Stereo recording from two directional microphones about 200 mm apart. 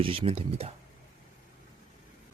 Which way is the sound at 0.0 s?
25° right (ahead or behind).